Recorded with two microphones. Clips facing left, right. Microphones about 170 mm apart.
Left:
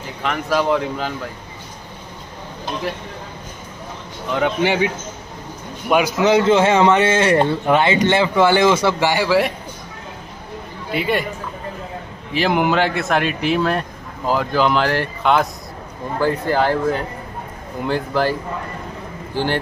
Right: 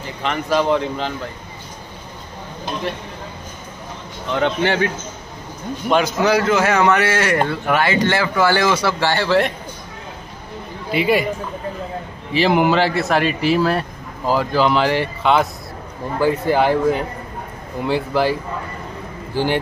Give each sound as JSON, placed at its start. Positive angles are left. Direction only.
{"t": 0.2, "sound": "speech", "side_deg": 0}
{"t": 4.3, "sound": "a man's voice", "side_deg": 10}
{"t": 6.2, "sound": "a man's voice", "side_deg": 25}
{"t": 9.0, "sound": "a man's voice", "side_deg": 10}
{"t": 10.9, "sound": "speech", "side_deg": -5}
{"t": 12.4, "sound": "speech", "side_deg": 0}
{"t": 16.2, "sound": "speech", "side_deg": -10}